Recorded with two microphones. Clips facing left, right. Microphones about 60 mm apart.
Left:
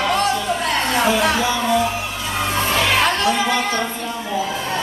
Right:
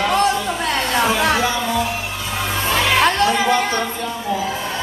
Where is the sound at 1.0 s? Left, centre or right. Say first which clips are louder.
Right 1 dB; right.